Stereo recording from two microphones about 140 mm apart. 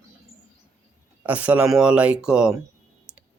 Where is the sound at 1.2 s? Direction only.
10° right (ahead or behind).